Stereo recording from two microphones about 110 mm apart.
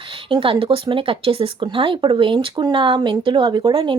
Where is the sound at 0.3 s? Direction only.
55° right (ahead or behind).